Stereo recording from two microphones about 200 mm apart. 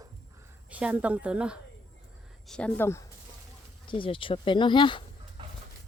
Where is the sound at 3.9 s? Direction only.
25° left (ahead or behind).